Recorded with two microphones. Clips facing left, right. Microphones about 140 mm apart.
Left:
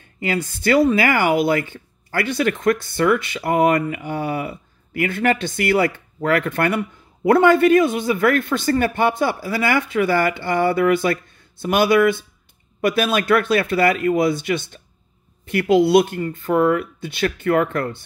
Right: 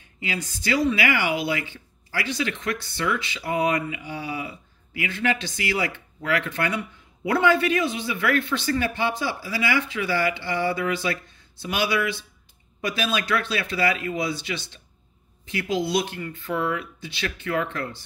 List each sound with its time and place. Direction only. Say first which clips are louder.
0.0 s speech: left 8 dB; 50° left (ahead or behind)
16.2 s speech: left 9 dB; 45° left (ahead or behind)